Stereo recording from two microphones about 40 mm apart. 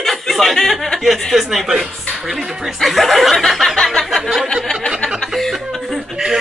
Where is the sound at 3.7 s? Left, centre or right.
Centre.